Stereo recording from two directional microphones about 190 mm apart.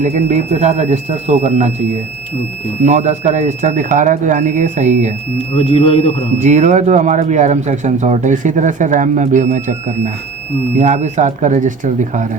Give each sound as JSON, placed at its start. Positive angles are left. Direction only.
{"t": 0.0, "sound": "speech", "side_deg": -40}
{"t": 2.8, "sound": "speech", "side_deg": -35}
{"t": 5.5, "sound": "speech", "side_deg": 30}
{"t": 6.4, "sound": "speech", "side_deg": -40}